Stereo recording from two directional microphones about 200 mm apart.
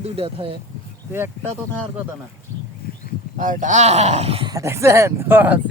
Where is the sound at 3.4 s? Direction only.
40° right (ahead or behind); by 5.6 s 10° right (ahead or behind).